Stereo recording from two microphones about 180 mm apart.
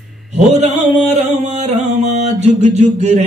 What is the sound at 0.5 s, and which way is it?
Mantra, 40° right (ahead or behind).